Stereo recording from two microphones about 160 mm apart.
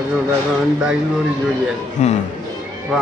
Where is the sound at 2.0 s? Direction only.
45° left (ahead or behind).